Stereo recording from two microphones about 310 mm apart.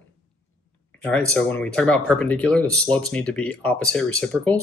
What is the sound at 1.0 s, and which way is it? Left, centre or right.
Speech, centre.